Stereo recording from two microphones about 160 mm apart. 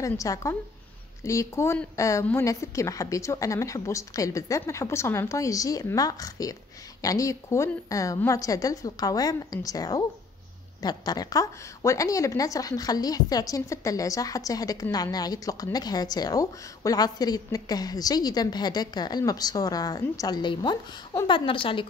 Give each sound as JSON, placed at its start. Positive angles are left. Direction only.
{"t": 0.0, "sound": "a woman's voice", "side_deg": 20}